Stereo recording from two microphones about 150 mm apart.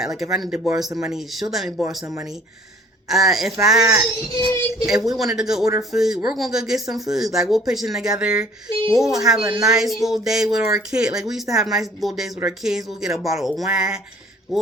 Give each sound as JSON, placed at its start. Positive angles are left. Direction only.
{"t": 0.0, "sound": "speech", "side_deg": 0}
{"t": 3.1, "sound": "speech", "side_deg": 0}
{"t": 4.4, "sound": "speech", "side_deg": 25}
{"t": 4.9, "sound": "speech", "side_deg": 0}